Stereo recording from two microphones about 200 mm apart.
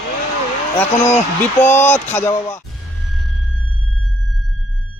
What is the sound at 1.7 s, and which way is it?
Speech, 10° left (ahead or behind).